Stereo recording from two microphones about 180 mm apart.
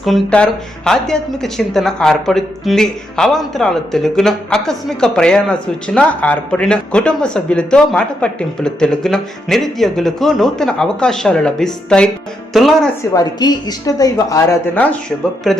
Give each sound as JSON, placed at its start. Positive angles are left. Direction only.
{"t": 0.0, "sound": "speech", "side_deg": 5}
{"t": 13.0, "sound": "a woman's voice", "side_deg": 20}
{"t": 15.5, "sound": "speech", "side_deg": 0}